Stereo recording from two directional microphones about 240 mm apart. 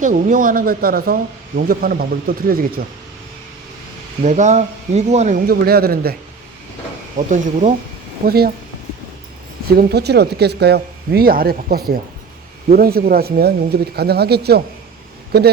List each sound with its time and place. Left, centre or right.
0.0 s speech: right
4.2 s speech: right
7.2 s speech: right
9.7 s speech: right